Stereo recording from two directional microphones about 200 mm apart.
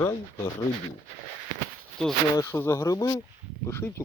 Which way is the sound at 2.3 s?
15° left (ahead or behind).